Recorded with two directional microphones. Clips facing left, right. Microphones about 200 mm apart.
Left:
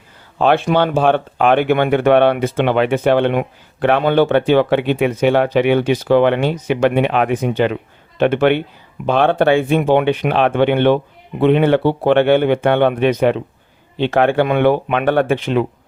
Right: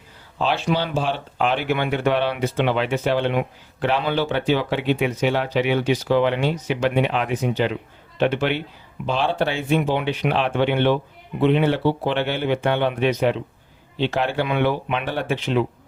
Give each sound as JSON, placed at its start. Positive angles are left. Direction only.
{"t": 0.3, "sound": "speech", "side_deg": 55}